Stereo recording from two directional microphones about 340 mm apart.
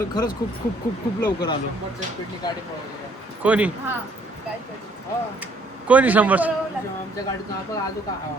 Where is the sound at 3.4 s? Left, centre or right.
Centre.